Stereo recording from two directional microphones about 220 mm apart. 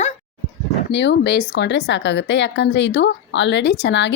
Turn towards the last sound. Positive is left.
turn(degrees=55)  # may be behind; listen again after turning